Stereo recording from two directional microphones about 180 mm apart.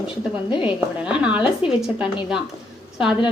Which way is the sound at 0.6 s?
5° right (ahead or behind).